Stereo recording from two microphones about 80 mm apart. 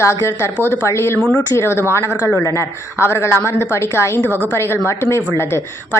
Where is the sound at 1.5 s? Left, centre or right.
Left.